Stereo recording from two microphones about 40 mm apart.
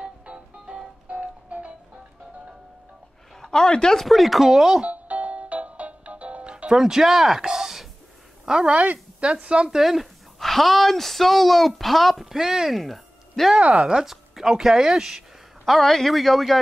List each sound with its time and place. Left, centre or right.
0.0 s music: right
3.3 s a woman's voice: centre
4.0 s speech: centre
4.8 s music: right
6.5 s music: right
6.8 s speech: centre
8.5 s speech: centre
9.7 s a woman's voice: centre
13.7 s speech: centre
14.1 s a sound: centre
14.6 s speech: centre
15.6 s speech: centre